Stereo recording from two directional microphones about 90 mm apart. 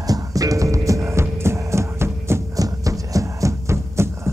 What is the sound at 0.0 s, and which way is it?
Music, 40° right (ahead or behind).